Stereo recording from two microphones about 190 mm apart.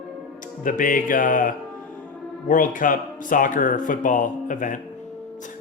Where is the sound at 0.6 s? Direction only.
45° left (ahead or behind).